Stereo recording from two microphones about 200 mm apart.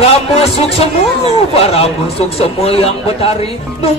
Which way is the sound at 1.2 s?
30° left (ahead or behind).